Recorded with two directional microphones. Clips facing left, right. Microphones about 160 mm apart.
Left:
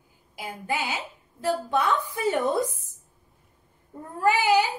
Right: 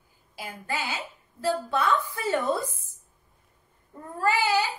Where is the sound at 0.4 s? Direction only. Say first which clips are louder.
Left 3 dB; 15° left (ahead or behind).